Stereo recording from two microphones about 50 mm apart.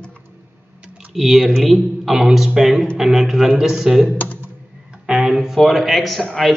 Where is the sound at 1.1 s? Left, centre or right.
Centre.